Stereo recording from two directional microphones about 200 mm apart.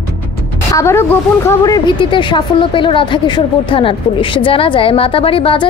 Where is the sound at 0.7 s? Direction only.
15° left (ahead or behind).